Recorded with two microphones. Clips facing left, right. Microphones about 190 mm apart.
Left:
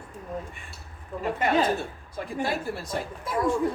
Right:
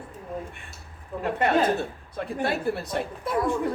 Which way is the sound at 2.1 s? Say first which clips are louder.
Right 2 dB; 60° right (ahead or behind).